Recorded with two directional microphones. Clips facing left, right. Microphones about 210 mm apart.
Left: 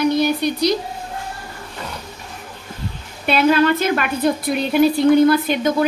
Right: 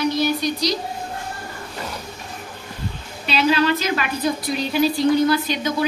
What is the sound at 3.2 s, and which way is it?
A woman's voice, 55° left (ahead or behind).